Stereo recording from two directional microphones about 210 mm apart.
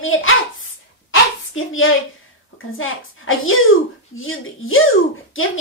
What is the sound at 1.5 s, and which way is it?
Speech, 70° left (ahead or behind).